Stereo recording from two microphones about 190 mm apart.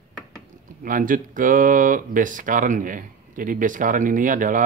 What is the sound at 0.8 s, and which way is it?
Speech, 45° right (ahead or behind).